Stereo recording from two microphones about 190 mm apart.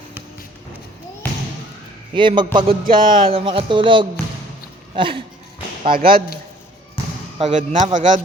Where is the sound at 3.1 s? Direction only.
30° right (ahead or behind).